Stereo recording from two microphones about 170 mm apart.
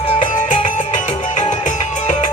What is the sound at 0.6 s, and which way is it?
Music, 45° left (ahead or behind).